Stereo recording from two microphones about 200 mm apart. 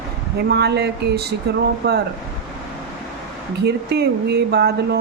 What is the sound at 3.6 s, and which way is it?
Speech, 55° right (ahead or behind).